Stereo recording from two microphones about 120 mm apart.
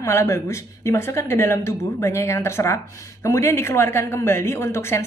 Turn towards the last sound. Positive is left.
turn(degrees=20)  # may be behind; listen again after turning